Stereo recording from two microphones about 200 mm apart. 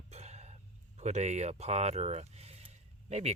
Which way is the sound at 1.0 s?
35° right (ahead or behind).